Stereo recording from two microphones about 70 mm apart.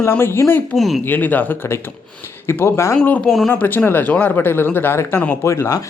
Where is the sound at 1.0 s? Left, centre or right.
Left.